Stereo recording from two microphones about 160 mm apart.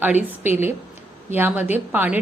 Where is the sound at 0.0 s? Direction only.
10° right (ahead or behind).